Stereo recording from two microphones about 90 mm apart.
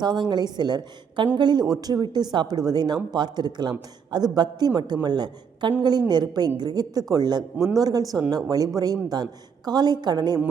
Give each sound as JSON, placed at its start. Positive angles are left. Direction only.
{"t": 0.0, "sound": "speech", "side_deg": -55}